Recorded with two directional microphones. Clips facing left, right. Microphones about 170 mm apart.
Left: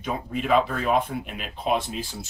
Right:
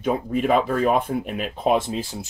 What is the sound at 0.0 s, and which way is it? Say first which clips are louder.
Speech: right 7 dB; 50° right (ahead or behind).